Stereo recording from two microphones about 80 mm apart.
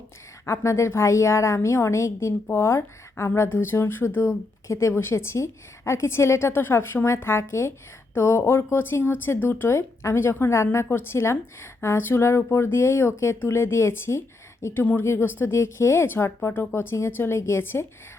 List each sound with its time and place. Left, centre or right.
0.4 s a woman's voice: left